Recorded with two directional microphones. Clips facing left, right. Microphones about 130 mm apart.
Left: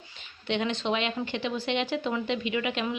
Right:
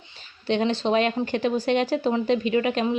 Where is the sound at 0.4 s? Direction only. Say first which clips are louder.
Right 6 dB; 35° right (ahead or behind).